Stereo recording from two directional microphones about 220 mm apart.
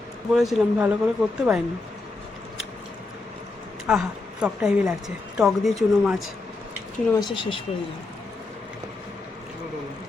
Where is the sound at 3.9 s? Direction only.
5° right (ahead or behind).